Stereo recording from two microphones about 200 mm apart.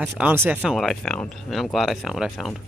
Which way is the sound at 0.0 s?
10° right (ahead or behind).